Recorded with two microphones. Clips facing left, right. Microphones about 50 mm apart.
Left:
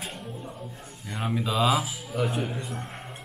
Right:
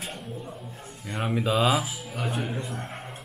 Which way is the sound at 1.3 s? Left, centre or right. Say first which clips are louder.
Right 1 dB; centre.